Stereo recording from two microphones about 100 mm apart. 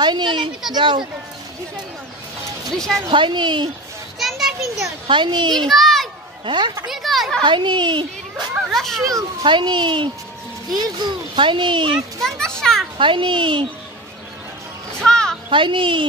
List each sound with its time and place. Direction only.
0.0 s a child's voice: 50° right (ahead or behind)
3.1 s a child's voice: 55° right (ahead or behind)
4.2 s children playing: 5° right (ahead or behind)
5.0 s a child's voice: 55° right (ahead or behind)
5.7 s a sound: centre (ahead or behind)
6.4 s a child's voice: 50° right (ahead or behind)
6.9 s speech: centre (ahead or behind)
7.4 s a child's voice: 50° right (ahead or behind)
8.6 s a sound: centre (ahead or behind)
9.4 s a child's voice: 50° right (ahead or behind)
12.2 s children playing: 5° left (ahead or behind)
12.9 s a child's voice: 55° right (ahead or behind)
15.0 s children playing: 5° left (ahead or behind)
15.5 s a child's voice: 55° right (ahead or behind)